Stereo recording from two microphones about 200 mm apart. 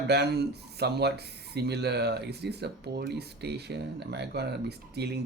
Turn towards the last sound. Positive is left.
turn(degrees=-55)  # may be behind; listen again after turning